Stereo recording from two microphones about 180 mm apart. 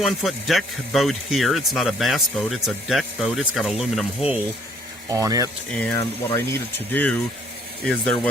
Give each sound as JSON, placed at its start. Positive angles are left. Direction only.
{"t": 0.0, "sound": "speech", "side_deg": 0}
{"t": 5.0, "sound": "speech", "side_deg": -20}
{"t": 5.7, "sound": "speech", "side_deg": 15}